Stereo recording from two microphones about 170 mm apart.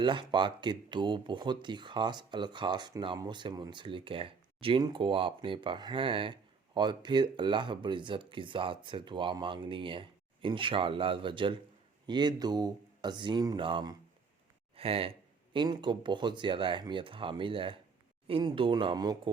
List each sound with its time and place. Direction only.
0.0 s speech: 30° right (ahead or behind)